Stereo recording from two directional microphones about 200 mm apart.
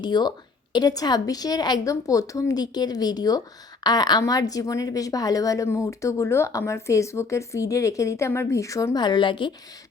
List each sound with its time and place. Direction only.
0.0 s a woman's voice: 20° left (ahead or behind)